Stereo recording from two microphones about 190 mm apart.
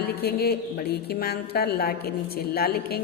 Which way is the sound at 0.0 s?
55° left (ahead or behind).